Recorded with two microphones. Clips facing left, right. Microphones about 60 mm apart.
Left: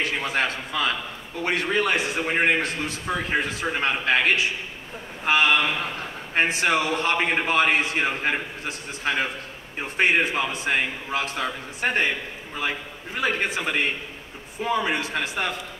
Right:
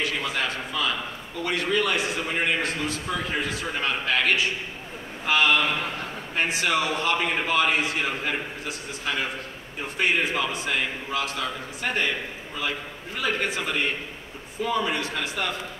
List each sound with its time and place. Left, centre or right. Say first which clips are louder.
0.0 s a man's voice: left 2 dB; left